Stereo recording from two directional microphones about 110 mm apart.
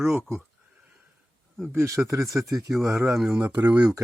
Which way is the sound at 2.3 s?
Centre (ahead or behind).